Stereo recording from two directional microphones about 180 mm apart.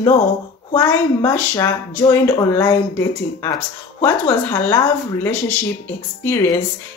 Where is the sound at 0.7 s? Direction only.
10° left (ahead or behind).